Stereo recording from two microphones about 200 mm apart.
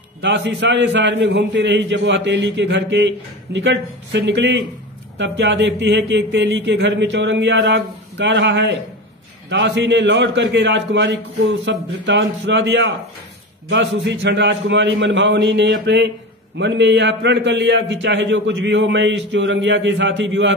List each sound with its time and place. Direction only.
0.2 s a man's voice: 65° right (ahead or behind)